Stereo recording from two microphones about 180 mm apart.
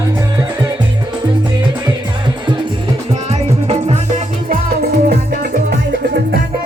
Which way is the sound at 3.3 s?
35° right (ahead or behind).